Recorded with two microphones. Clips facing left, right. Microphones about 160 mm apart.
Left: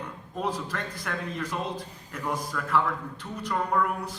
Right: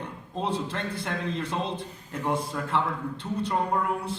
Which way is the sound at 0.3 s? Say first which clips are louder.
Right 1 dB; 25° right (ahead or behind).